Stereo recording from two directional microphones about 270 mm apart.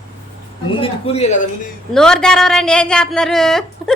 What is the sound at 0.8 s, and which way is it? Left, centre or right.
Speech, left.